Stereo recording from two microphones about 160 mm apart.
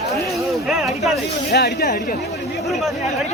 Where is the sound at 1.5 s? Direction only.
90° left.